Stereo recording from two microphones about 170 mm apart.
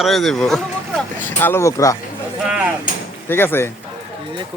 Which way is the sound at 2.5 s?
10° right (ahead or behind).